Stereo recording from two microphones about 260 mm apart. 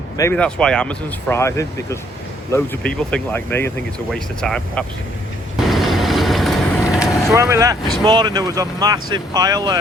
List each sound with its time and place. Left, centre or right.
0.2 s speech: centre
5.5 s vehicle: centre
7.3 s speech: centre